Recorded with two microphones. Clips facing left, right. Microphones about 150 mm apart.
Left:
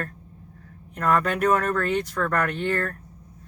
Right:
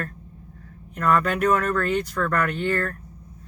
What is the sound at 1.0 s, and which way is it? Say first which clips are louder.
Speech: right 1 dB; 40° left (ahead or behind).